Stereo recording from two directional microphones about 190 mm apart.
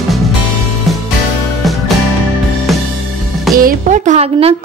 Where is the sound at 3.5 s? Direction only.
45° right (ahead or behind).